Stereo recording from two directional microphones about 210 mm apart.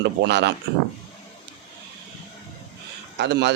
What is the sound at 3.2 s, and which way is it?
Speech, 55° right (ahead or behind).